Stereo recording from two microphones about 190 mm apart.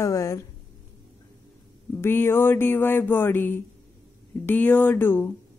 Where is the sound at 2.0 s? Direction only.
10° left (ahead or behind).